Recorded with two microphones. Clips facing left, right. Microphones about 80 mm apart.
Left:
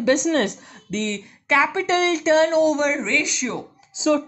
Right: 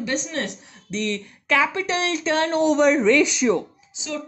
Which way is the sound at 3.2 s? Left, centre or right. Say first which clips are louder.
Right 7 dB; centre.